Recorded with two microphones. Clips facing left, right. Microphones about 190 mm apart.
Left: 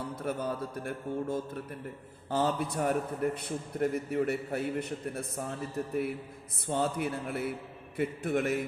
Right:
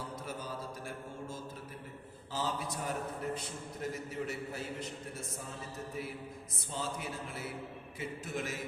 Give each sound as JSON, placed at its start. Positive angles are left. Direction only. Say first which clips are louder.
{"t": 0.2, "sound": "a man's voice", "louder": "left 8 dB", "side_deg": 60}